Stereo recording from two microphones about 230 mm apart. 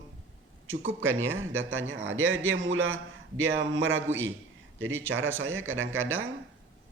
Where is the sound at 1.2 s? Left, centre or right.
Centre.